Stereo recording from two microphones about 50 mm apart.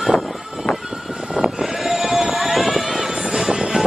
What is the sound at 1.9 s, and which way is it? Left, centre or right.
Vehicle, centre.